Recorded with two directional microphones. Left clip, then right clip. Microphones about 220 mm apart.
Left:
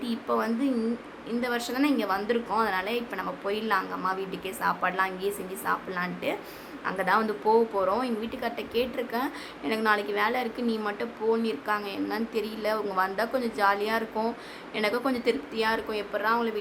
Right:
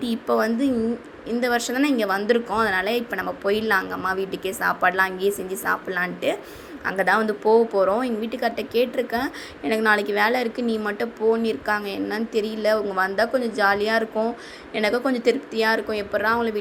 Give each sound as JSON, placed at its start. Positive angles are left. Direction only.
{"t": 0.0, "sound": "a woman's voice", "side_deg": -20}